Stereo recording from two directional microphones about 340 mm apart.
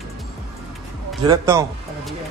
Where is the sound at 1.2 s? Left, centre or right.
Centre.